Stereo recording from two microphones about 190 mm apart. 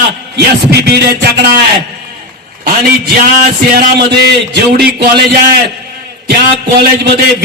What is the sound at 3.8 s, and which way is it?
Music, 55° right (ahead or behind).